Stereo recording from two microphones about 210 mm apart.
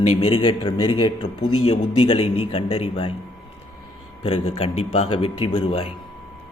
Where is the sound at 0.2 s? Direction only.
25° left (ahead or behind).